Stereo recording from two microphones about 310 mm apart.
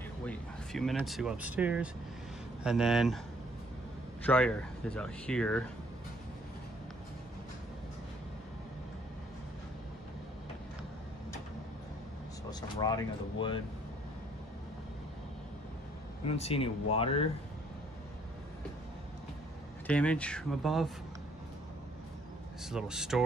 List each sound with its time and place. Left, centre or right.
0.2 s speech: centre
4.2 s speech: centre
12.4 s speech: centre
16.3 s speech: centre
19.9 s speech: centre
22.6 s speech: centre